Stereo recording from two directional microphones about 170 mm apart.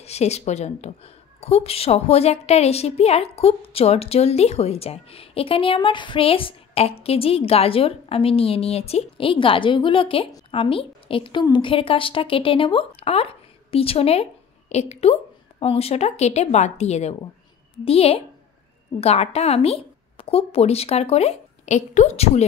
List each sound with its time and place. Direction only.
0.0 s a woman's voice: 40° left (ahead or behind)